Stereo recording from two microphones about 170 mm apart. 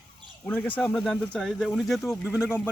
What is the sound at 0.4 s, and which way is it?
Speech, 10° left (ahead or behind).